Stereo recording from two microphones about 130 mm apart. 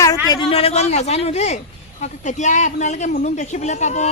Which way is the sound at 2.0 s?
70° left (ahead or behind).